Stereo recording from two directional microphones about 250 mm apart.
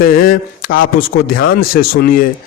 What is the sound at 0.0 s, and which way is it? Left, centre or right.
Speech, left.